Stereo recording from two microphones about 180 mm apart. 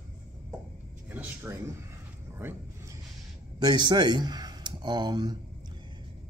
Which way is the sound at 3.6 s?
25° right (ahead or behind).